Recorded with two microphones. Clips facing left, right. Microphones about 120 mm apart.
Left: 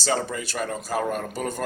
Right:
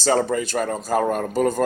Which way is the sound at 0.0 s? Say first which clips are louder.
Right 6 dB; 40° right (ahead or behind).